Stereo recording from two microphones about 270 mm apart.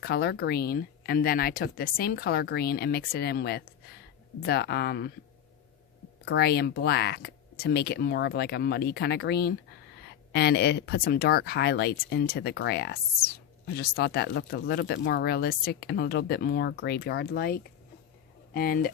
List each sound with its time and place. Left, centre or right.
0.0 s speech: left
6.2 s speech: left